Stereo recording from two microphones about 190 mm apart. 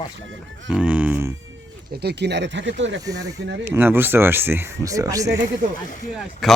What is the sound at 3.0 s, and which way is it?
A man's voice, 20° right (ahead or behind).